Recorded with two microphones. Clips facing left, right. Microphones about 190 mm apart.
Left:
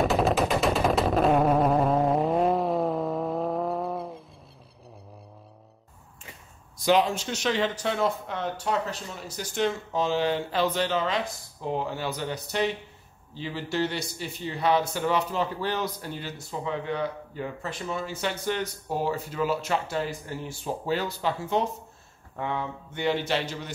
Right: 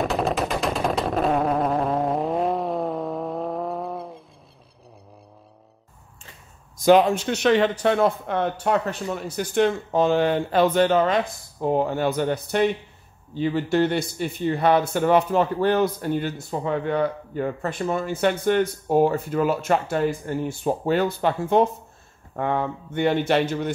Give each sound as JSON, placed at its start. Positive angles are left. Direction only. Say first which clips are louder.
{"t": 0.0, "sound": "machine gun", "louder": "even", "side_deg": 0}
{"t": 6.8, "sound": "speech", "louder": "right 7 dB", "side_deg": -50}